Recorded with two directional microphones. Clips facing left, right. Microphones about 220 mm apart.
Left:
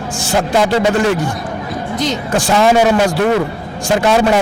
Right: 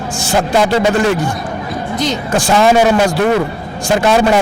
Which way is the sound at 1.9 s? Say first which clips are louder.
Right 1 dB; 5° left (ahead or behind).